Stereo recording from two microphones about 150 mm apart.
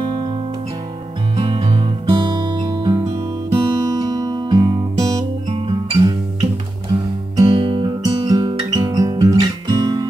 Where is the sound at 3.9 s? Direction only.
25° right (ahead or behind).